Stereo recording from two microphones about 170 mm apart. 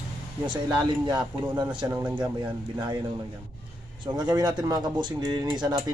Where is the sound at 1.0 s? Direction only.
25° right (ahead or behind).